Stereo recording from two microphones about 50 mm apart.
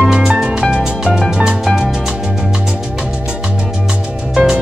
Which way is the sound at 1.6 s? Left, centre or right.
Centre.